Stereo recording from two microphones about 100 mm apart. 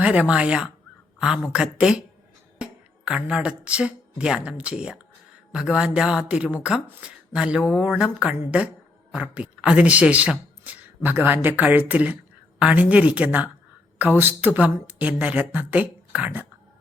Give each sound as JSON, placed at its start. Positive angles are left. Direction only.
{"t": 0.0, "sound": "a woman's voice", "side_deg": -10}